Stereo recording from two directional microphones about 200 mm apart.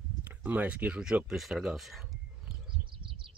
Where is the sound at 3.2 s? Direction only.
25° right (ahead or behind).